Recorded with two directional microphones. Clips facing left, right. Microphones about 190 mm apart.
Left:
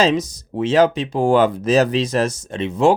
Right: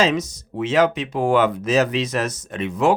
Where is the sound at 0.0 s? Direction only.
35° left (ahead or behind).